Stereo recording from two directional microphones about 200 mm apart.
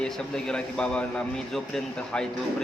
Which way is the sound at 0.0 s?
5° left (ahead or behind).